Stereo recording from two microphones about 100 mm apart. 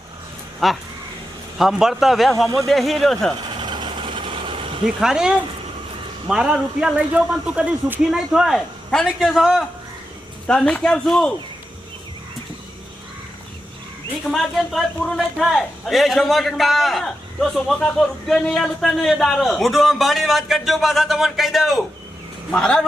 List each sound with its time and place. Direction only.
0.6 s speech: centre (ahead or behind)
3.5 s vehicle: 45° right (ahead or behind)
4.9 s a man's voice: 5° right (ahead or behind)
10.4 s a man's voice: 10° left (ahead or behind)
14.3 s speech: centre (ahead or behind)